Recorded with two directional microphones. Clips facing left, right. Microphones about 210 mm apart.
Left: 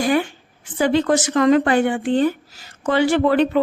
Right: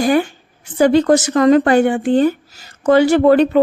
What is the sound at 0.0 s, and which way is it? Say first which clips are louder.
A woman's voice: right 4 dB; 40° right (ahead or behind).